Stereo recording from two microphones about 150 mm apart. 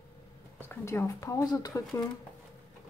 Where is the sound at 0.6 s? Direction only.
15° left (ahead or behind).